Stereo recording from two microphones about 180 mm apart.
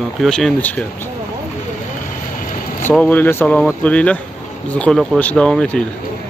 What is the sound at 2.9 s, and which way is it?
Speech, 10° left (ahead or behind).